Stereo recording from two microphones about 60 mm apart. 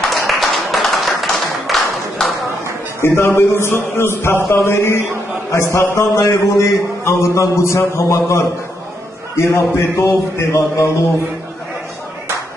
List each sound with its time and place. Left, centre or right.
0.1 s clapping: centre
3.0 s a man's voice: left